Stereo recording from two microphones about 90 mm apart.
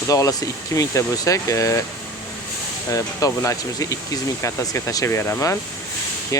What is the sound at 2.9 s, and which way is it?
Speech, 35° left (ahead or behind).